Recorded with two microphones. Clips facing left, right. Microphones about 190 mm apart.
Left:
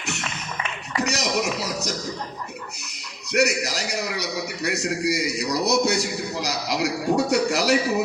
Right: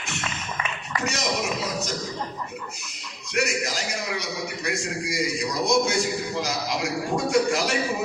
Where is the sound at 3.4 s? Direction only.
70° left (ahead or behind).